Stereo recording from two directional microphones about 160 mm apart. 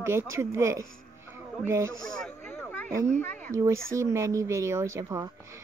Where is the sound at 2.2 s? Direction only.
10° left (ahead or behind).